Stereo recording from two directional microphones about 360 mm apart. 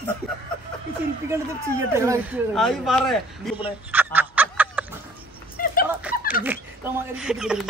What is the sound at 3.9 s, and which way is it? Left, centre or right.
Fowl, centre.